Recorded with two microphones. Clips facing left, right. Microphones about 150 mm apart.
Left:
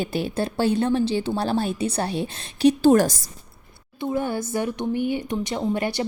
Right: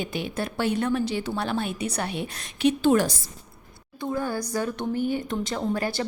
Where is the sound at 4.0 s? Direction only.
20° left (ahead or behind).